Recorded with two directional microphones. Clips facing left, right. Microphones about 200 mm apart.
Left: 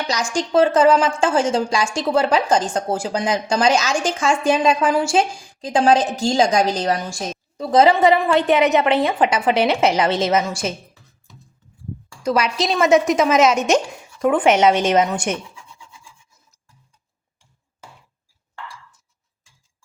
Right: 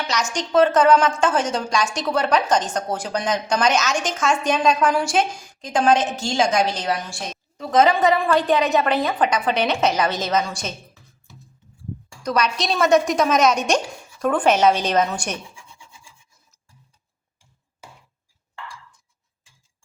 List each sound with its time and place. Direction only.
0.1 s a woman's voice: 30° left (ahead or behind)
12.2 s a woman's voice: 25° left (ahead or behind)
12.6 s a woman's voice: 5° left (ahead or behind)
13.7 s a woman's voice: 20° left (ahead or behind)